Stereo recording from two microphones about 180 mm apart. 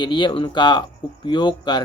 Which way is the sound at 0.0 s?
25° left (ahead or behind).